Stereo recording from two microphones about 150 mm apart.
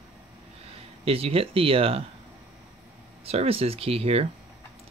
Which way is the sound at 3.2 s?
40° right (ahead or behind).